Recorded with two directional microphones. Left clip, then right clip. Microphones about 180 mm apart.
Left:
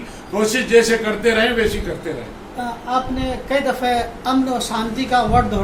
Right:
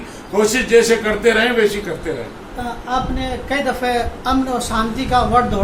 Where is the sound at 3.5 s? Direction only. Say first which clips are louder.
Left 1 dB; 15° left (ahead or behind).